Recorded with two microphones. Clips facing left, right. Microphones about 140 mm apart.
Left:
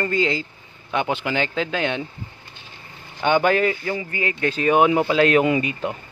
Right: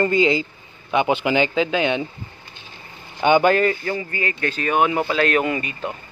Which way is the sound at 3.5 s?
10° left (ahead or behind).